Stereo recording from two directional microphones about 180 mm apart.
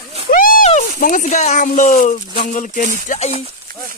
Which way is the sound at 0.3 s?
50° left (ahead or behind).